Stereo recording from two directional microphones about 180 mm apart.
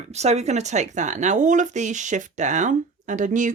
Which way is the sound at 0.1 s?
35° right (ahead or behind).